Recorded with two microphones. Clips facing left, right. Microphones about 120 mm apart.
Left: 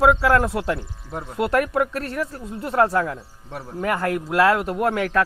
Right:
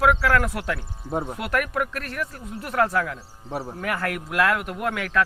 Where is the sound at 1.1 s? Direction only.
20° right (ahead or behind).